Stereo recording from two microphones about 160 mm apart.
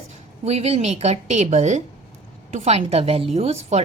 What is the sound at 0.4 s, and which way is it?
A woman's voice, 40° right (ahead or behind).